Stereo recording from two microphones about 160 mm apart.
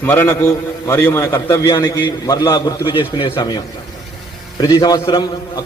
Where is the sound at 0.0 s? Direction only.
15° left (ahead or behind).